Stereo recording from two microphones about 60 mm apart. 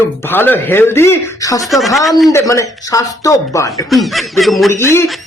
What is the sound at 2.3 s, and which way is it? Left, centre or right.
Speech, left.